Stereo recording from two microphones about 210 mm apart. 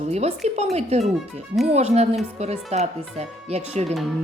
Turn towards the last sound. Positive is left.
turn(degrees=-30)  # may be behind; listen again after turning